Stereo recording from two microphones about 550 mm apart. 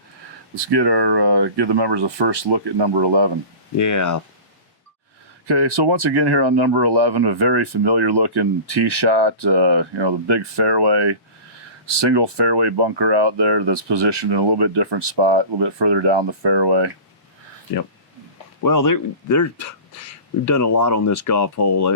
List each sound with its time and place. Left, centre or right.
0.6 s speech: right
3.8 s speech: left
5.5 s speech: right
18.6 s speech: left